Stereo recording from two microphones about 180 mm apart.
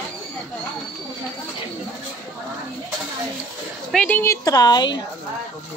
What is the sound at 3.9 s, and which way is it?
Speech, 5° left (ahead or behind).